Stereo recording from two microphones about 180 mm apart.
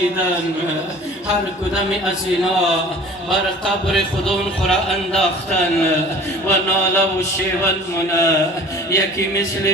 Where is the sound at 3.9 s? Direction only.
Centre (ahead or behind).